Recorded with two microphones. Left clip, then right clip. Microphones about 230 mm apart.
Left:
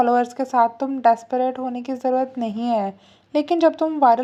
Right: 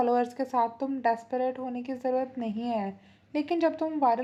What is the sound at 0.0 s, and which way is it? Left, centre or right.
Speech, centre.